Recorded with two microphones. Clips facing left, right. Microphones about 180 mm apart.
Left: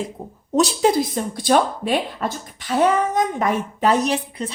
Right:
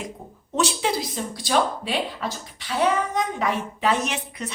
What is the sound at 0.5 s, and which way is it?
Speech, 40° left (ahead or behind).